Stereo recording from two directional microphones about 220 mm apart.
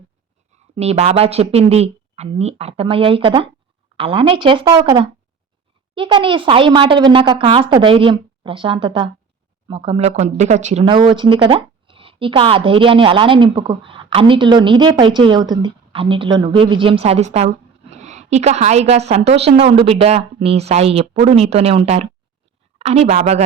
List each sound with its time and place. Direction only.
0.5 s speech: 30° right (ahead or behind)